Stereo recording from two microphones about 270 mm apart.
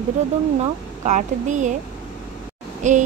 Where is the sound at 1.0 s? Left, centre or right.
Right.